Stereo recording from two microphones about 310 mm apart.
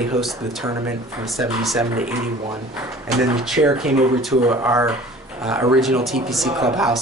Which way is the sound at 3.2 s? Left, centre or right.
Centre.